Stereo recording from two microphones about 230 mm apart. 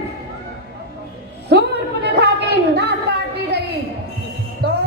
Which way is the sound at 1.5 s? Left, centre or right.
Right.